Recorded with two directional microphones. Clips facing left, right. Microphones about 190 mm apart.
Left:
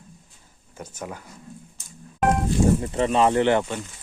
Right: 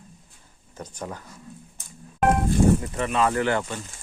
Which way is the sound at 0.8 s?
10° left (ahead or behind).